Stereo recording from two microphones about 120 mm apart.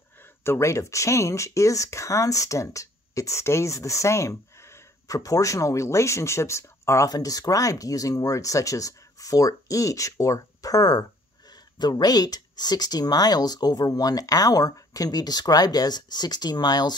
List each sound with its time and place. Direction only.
0.4 s speech: 20° left (ahead or behind)